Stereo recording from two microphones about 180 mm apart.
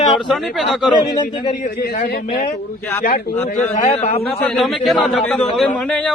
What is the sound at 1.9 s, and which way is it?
Speech, 50° left (ahead or behind).